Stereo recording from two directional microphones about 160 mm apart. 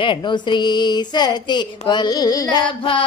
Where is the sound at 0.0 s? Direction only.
30° left (ahead or behind).